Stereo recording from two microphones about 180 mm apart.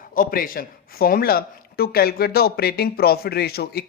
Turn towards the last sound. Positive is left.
turn(degrees=60)  # may be behind; listen again after turning